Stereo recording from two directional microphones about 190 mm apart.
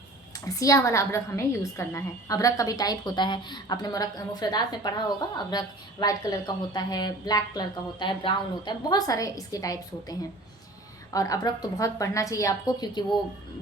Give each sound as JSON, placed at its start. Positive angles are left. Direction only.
{"t": 0.3, "sound": "a woman's voice", "side_deg": 20}